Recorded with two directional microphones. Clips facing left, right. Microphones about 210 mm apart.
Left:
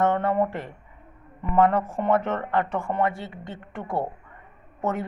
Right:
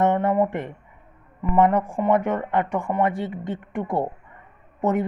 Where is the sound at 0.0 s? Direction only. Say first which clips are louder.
Right 2 dB; 20° right (ahead or behind).